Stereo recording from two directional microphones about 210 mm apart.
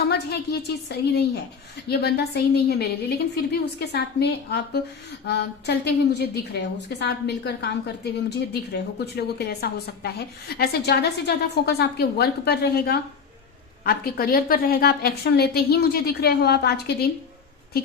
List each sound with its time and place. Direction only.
0.1 s a woman's voice: 50° left (ahead or behind)